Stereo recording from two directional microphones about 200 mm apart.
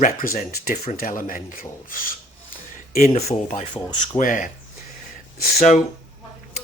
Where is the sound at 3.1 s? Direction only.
30° left (ahead or behind).